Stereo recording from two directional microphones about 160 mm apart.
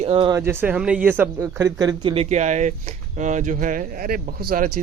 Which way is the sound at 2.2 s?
45° right (ahead or behind).